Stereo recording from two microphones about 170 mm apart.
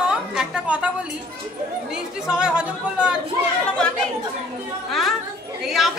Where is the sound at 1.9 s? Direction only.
5° right (ahead or behind).